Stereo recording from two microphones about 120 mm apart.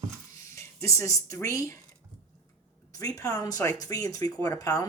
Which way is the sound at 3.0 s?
30° left (ahead or behind).